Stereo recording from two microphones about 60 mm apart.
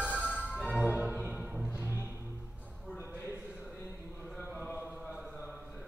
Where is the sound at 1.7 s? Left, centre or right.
Left.